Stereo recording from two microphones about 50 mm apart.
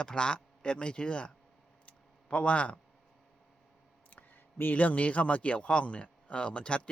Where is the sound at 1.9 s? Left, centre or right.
Left.